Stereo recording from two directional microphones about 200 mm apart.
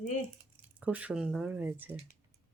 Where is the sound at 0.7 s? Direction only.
5° right (ahead or behind).